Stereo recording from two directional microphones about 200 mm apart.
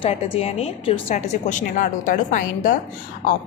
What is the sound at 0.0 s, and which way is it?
A woman's voice, 30° left (ahead or behind).